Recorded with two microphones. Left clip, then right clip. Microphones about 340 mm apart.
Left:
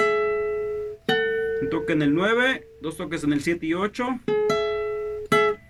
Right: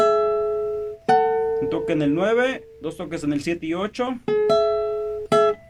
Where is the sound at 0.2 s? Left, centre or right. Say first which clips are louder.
Right 3 dB; right.